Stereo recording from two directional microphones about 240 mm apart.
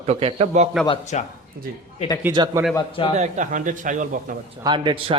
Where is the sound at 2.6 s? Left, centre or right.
Centre.